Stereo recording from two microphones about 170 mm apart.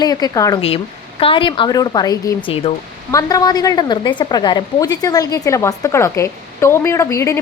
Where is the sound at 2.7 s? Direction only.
40° left (ahead or behind).